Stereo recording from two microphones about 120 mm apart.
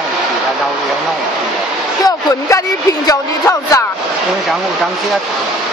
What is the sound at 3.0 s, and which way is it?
Speech, 30° left (ahead or behind).